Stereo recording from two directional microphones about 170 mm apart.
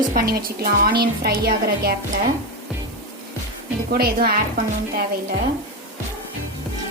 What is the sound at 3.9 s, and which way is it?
Speech, 60° right (ahead or behind).